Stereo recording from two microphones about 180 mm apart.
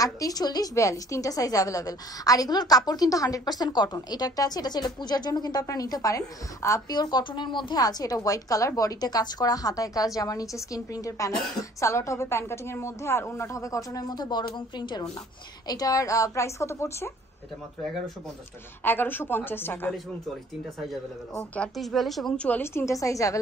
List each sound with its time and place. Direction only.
0.0 s a woman's voice: 20° left (ahead or behind)
18.9 s a woman's voice: 10° left (ahead or behind)
21.5 s a woman's voice: centre (ahead or behind); by 23.4 s 20° left (ahead or behind)